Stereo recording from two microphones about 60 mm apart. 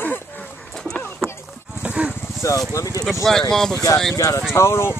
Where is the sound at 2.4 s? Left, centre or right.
Left.